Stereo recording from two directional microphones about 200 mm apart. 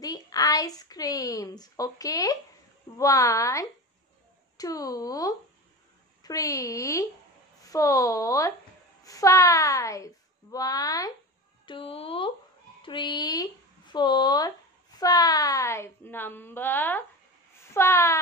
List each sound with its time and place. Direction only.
0.0 s a woman's voice: 20° left (ahead or behind)